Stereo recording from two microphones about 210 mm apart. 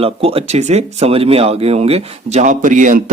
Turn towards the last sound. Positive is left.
turn(degrees=-40)  # may be behind; listen again after turning